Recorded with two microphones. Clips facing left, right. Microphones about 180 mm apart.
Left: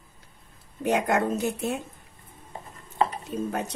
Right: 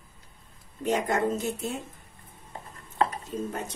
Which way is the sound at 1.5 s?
65° left (ahead or behind).